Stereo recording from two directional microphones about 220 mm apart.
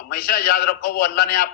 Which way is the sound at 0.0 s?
40° left (ahead or behind).